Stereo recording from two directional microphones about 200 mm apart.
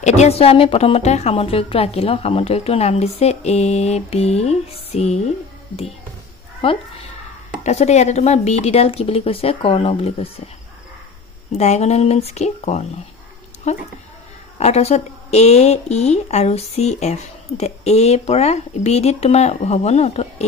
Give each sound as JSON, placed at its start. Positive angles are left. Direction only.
{"t": 0.0, "sound": "speech", "side_deg": 30}
{"t": 7.6, "sound": "speech", "side_deg": 35}
{"t": 11.5, "sound": "speech", "side_deg": 35}